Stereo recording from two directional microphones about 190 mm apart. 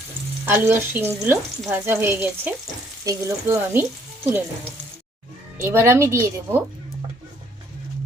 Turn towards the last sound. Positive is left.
turn(degrees=-15)  # may be behind; listen again after turning